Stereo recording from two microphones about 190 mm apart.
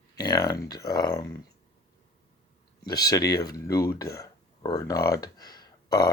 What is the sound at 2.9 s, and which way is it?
Speech, 20° left (ahead or behind).